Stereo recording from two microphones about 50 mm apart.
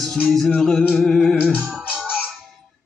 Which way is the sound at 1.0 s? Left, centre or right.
Centre.